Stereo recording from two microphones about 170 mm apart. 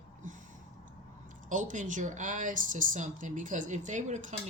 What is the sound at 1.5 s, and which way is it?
Speech, 50° right (ahead or behind).